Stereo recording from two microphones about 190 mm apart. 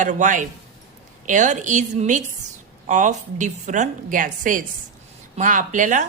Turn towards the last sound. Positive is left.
turn(degrees=-40)  # may be behind; listen again after turning